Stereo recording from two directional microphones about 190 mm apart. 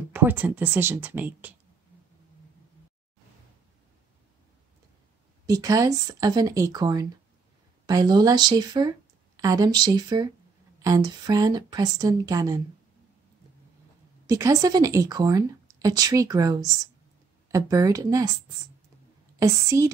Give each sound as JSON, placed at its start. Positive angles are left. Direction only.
{"t": 0.1, "sound": "speech", "side_deg": -10}
{"t": 5.5, "sound": "a woman's voice", "side_deg": -15}
{"t": 14.2, "sound": "a woman's voice", "side_deg": -15}
{"t": 19.3, "sound": "a woman's voice", "side_deg": -15}